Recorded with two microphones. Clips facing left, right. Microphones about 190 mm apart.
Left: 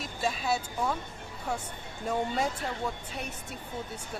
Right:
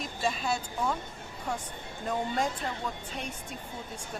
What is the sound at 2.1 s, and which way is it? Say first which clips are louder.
Speech: left 1 dB; 5° left (ahead or behind).